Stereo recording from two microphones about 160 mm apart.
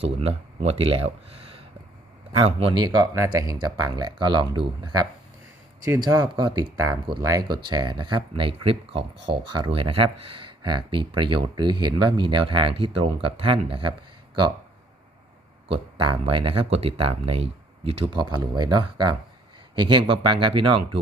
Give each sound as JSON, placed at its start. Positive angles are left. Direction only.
{"t": 0.0, "sound": "speech", "side_deg": -40}
{"t": 15.7, "sound": "speech", "side_deg": -30}